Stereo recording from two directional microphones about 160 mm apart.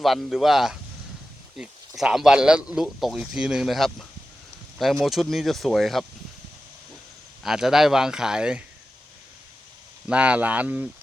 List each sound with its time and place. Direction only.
0.0 s speech: centre (ahead or behind)
7.4 s speech: centre (ahead or behind)
10.1 s speech: 10° right (ahead or behind)